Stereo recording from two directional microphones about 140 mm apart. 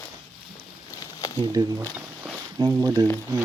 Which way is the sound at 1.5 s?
25° right (ahead or behind).